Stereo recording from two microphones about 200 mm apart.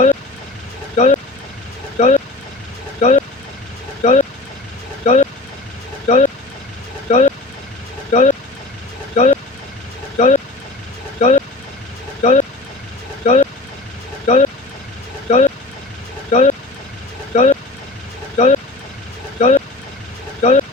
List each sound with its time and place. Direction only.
0.9 s speech: 35° left (ahead or behind)